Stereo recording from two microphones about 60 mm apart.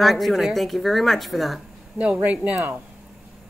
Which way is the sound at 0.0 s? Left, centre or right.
Centre.